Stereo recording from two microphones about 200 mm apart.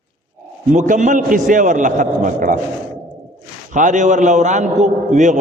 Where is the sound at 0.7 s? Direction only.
40° right (ahead or behind).